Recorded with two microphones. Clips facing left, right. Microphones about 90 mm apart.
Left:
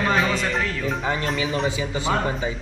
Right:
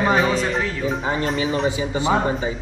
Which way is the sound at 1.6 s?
25° right (ahead or behind).